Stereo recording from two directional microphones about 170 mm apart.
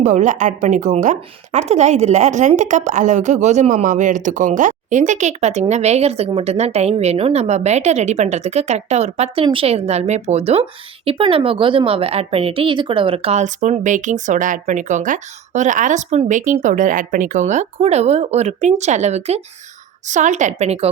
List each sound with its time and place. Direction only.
0.0 s a woman's voice: 45° right (ahead or behind)